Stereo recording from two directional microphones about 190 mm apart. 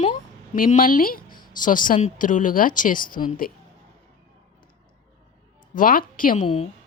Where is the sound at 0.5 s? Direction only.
45° left (ahead or behind).